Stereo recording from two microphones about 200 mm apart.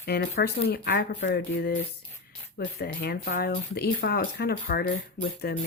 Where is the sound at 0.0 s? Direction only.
55° left (ahead or behind).